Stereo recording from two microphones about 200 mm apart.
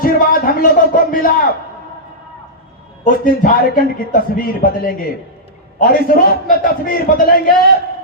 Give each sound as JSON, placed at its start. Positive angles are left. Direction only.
{"t": 0.0, "sound": "a man's voice", "side_deg": 45}
{"t": 3.0, "sound": "a man's voice", "side_deg": 40}